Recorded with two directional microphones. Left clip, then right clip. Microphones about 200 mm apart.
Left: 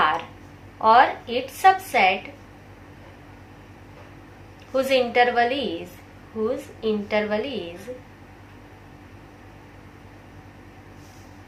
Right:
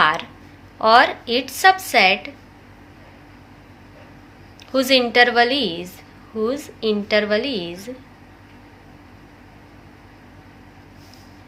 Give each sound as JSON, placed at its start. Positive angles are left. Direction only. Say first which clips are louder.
{"t": 0.0, "sound": "a sound", "louder": "right 4 dB", "side_deg": -45}
{"t": 0.8, "sound": "a woman's voice", "louder": "right 2 dB", "side_deg": -45}
{"t": 4.7, "sound": "a woman's voice", "louder": "right 4 dB", "side_deg": -45}